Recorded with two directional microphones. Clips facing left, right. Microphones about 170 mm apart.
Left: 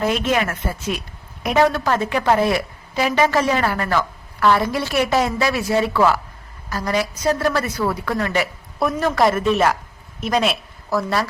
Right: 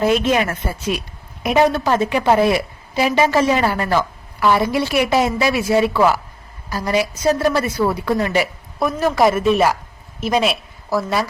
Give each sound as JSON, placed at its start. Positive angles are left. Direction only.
{"t": 0.0, "sound": "a woman's voice", "side_deg": -25}
{"t": 8.8, "sound": "a woman's voice", "side_deg": 0}